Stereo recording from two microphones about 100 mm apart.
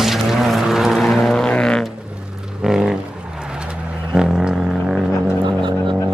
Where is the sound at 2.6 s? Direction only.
5° right (ahead or behind).